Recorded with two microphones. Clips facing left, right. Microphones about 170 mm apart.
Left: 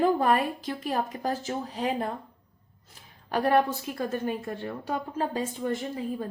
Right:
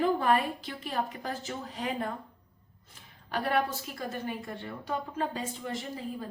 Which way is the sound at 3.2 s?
45° left (ahead or behind).